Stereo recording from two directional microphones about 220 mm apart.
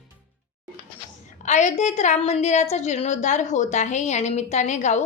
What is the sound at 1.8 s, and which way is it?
A woman's voice, 30° left (ahead or behind).